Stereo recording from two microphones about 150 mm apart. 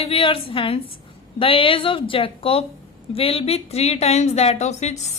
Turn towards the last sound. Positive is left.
turn(degrees=50)  # may be behind; listen again after turning